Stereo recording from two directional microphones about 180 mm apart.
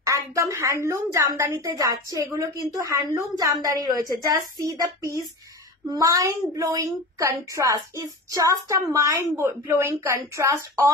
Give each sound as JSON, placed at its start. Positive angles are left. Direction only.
{"t": 0.0, "sound": "a woman's voice", "side_deg": -15}